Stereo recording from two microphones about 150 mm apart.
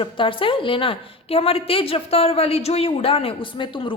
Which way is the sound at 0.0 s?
35° left (ahead or behind).